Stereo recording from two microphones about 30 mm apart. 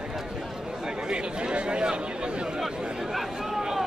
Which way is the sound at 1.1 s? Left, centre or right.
Right.